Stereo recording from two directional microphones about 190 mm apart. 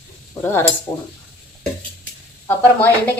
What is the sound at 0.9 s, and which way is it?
Speech, 10° left (ahead or behind).